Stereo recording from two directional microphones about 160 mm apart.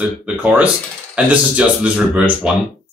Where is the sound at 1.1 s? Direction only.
5° right (ahead or behind).